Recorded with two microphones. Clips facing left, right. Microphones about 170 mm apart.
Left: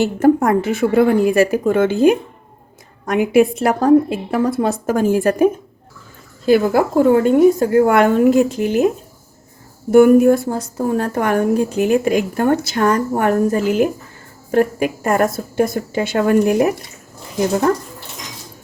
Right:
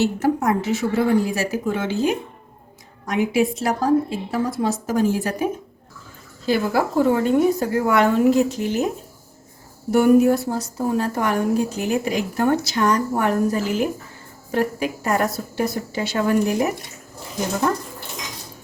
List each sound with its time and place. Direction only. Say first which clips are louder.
0.0 s a woman's voice: left 6 dB; 55° left (ahead or behind)
9.9 s a woman's voice: left 5 dB; 55° left (ahead or behind)